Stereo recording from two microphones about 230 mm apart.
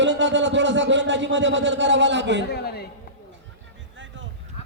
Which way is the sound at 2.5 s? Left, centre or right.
Left.